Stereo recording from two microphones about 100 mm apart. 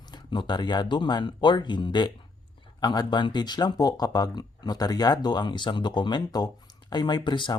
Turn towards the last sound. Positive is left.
turn(degrees=50)  # may be behind; listen again after turning